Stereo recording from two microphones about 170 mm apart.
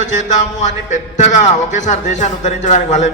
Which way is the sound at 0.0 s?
45° left (ahead or behind).